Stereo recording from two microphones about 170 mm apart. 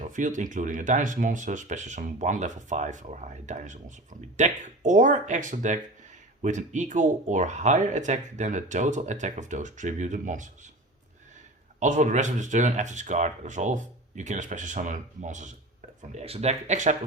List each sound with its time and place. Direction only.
0.0 s speech: 45° right (ahead or behind)
11.8 s speech: 45° right (ahead or behind)